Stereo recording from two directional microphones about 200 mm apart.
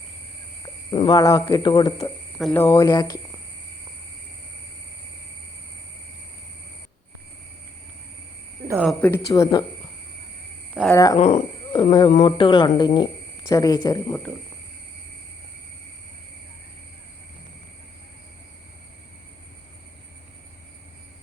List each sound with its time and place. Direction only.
0.6 s speech: 25° left (ahead or behind)
8.8 s speech: 5° left (ahead or behind)
10.8 s speech: 15° left (ahead or behind)
11.2 s speech: 35° left (ahead or behind)